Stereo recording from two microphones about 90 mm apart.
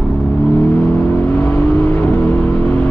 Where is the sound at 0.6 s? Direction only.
20° left (ahead or behind).